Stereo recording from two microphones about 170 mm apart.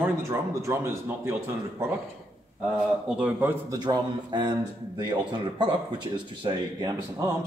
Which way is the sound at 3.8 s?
25° right (ahead or behind).